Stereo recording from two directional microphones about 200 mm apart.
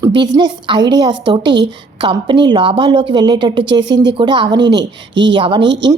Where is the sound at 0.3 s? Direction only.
25° right (ahead or behind).